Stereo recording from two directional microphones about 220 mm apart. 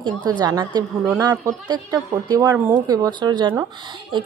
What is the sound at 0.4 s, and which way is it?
A woman's voice, 20° right (ahead or behind).